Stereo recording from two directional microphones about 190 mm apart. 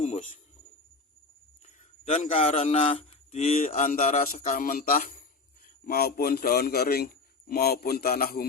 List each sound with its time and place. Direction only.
0.0 s cricket: 35° left (ahead or behind)
1.6 s a man's voice: 35° left (ahead or behind); by 8.4 s 55° left (ahead or behind)